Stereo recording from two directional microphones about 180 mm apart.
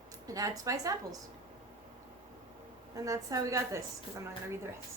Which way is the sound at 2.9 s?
20° right (ahead or behind).